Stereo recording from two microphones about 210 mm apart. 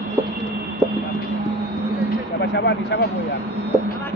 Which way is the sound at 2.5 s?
55° left (ahead or behind).